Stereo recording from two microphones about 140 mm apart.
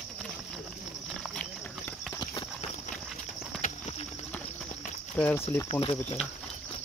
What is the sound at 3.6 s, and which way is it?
Clip-clop, 50° left (ahead or behind).